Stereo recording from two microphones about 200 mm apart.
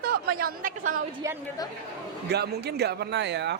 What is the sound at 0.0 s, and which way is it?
A woman's voice, 50° right (ahead or behind).